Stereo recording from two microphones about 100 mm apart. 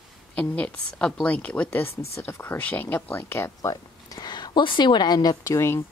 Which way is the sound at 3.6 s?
35° left (ahead or behind).